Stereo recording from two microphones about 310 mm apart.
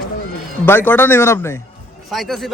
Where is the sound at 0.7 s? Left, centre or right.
Centre.